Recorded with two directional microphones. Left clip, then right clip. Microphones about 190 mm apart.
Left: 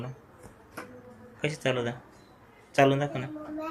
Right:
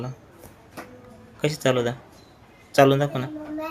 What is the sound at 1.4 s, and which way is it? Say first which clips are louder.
Speech: right 7 dB; 40° right (ahead or behind).